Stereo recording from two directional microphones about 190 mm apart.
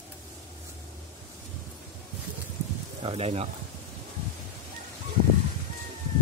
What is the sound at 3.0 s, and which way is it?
Speech, 30° right (ahead or behind).